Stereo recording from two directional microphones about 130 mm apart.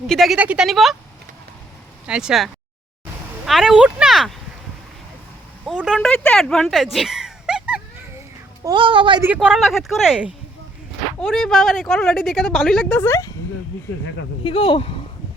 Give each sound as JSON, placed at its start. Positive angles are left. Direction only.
{"t": 0.1, "sound": "speech", "side_deg": 0}
{"t": 0.3, "sound": "speech", "side_deg": -10}
{"t": 2.0, "sound": "speech", "side_deg": -5}
{"t": 5.6, "sound": "speech", "side_deg": 0}
{"t": 8.7, "sound": "a woman's voice", "side_deg": -40}
{"t": 9.2, "sound": "speech", "side_deg": -10}
{"t": 13.0, "sound": "speech", "side_deg": 20}
{"t": 14.4, "sound": "speech", "side_deg": 40}